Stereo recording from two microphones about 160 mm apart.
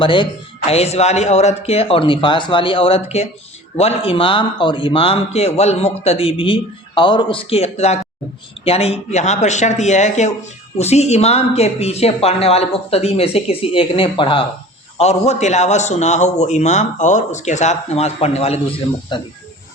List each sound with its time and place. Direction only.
0.0 s a man's voice: 30° left (ahead or behind)